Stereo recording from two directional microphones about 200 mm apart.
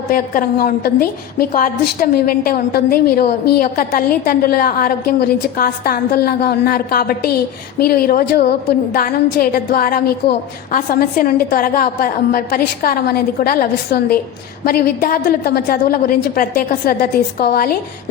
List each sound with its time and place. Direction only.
0.1 s a woman's voice: 45° left (ahead or behind)